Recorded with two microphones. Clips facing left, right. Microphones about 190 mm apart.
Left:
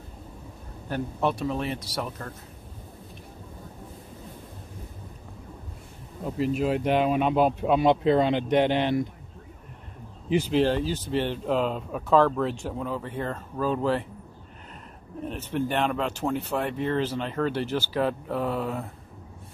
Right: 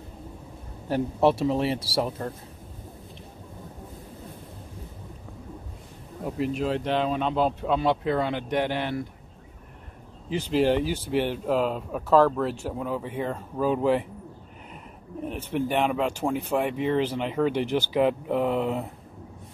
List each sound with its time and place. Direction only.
0.8 s a man's voice: 25° right (ahead or behind)
6.2 s speech: centre (ahead or behind); by 9.0 s 20° left (ahead or behind)
10.5 s speech: 15° right (ahead or behind)
15.2 s speech: 10° right (ahead or behind)